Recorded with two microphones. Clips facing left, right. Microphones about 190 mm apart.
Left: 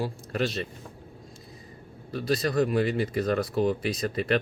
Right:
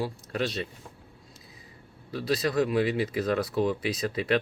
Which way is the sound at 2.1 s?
Centre (ahead or behind).